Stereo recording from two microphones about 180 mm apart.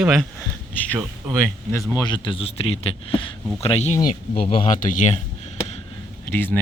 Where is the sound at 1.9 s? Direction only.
20° left (ahead or behind).